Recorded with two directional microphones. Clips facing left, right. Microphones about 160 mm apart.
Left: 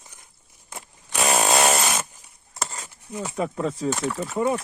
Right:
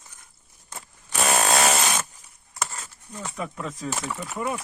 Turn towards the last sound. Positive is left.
turn(degrees=30)  # may be behind; listen again after turning